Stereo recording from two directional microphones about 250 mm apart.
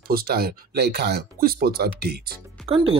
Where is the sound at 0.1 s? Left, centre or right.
Right.